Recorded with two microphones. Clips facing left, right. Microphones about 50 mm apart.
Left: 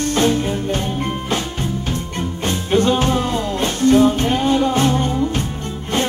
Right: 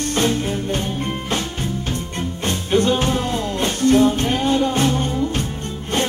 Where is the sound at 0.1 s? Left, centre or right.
Centre.